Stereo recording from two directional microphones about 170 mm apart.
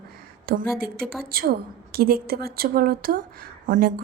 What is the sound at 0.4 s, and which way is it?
A woman's voice, 65° right (ahead or behind).